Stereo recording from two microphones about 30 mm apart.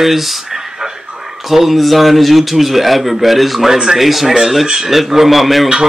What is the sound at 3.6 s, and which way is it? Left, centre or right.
Speech, centre.